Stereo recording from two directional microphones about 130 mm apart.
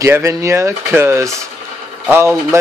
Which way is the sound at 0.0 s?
20° right (ahead or behind).